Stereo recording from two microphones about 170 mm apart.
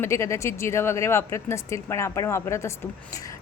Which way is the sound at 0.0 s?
15° left (ahead or behind).